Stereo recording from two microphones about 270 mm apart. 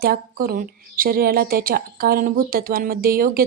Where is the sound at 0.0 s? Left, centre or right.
Right.